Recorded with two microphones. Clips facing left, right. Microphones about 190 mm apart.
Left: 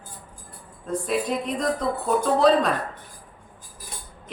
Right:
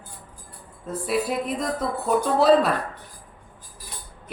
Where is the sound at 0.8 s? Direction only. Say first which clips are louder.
Even; 5° right (ahead or behind).